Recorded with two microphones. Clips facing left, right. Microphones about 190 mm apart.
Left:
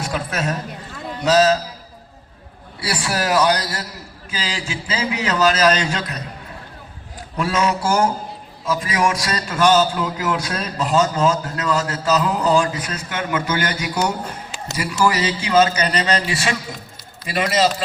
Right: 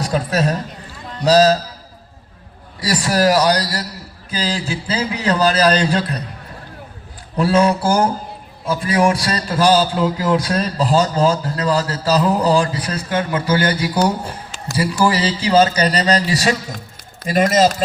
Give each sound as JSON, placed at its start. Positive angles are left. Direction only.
{"t": 0.0, "sound": "a man's voice", "side_deg": -35}
{"t": 2.8, "sound": "a man's voice", "side_deg": -40}
{"t": 7.3, "sound": "a man's voice", "side_deg": -35}